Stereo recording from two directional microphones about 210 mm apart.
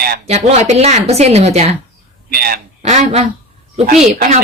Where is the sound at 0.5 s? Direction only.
30° right (ahead or behind).